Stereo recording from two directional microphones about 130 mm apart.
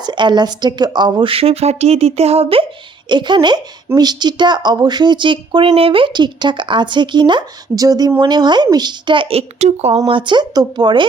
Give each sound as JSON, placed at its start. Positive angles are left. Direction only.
{"t": 0.0, "sound": "a woman's voice", "side_deg": -35}
{"t": 3.1, "sound": "a woman's voice", "side_deg": -35}
{"t": 10.1, "sound": "a woman's voice", "side_deg": -40}